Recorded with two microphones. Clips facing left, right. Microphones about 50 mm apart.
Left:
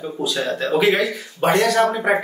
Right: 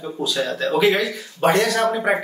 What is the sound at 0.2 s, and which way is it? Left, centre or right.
Speech, centre.